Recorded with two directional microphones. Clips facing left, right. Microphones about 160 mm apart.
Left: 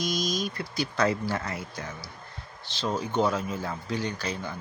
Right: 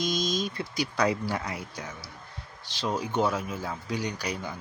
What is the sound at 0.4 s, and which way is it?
Speech, 20° right (ahead or behind).